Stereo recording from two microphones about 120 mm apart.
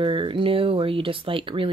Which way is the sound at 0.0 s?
45° right (ahead or behind).